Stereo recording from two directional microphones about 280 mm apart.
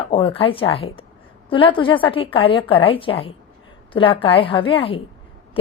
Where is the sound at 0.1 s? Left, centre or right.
Centre.